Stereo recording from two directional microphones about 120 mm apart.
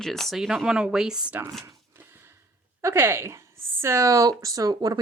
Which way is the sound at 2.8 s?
20° right (ahead or behind).